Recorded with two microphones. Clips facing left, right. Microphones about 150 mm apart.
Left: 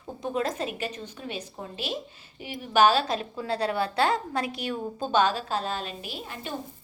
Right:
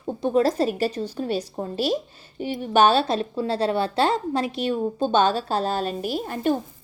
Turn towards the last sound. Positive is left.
turn(degrees=-45)  # may be behind; listen again after turning